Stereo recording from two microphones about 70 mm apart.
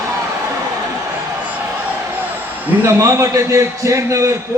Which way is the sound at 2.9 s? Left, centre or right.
Right.